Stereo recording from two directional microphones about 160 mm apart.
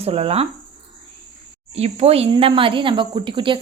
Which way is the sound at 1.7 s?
40° right (ahead or behind).